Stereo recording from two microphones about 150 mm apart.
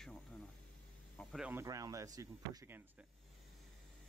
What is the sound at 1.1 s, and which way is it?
Speech, 5° left (ahead or behind).